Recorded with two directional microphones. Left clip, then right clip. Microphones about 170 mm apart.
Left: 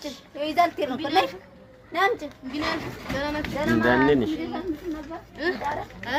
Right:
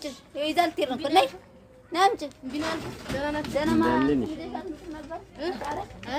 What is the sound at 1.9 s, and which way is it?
Speech, 90° right.